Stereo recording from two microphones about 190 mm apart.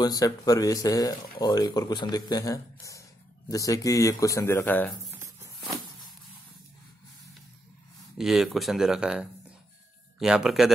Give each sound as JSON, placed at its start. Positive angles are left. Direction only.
{"t": 0.0, "sound": "a man's voice", "side_deg": 20}
{"t": 8.2, "sound": "speech", "side_deg": 0}